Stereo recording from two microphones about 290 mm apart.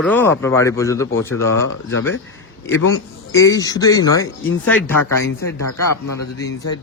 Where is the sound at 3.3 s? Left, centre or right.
Centre.